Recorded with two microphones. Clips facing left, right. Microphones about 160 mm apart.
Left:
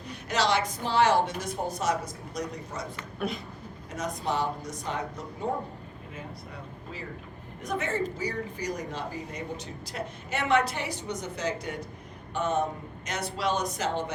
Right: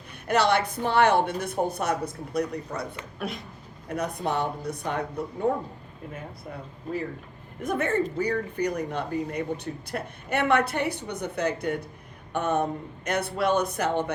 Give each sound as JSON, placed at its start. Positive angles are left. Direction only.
{"t": 0.1, "sound": "speech", "side_deg": -55}
{"t": 3.2, "sound": "a sound", "side_deg": 0}
{"t": 3.8, "sound": "speech", "side_deg": -60}
{"t": 7.6, "sound": "speech", "side_deg": -55}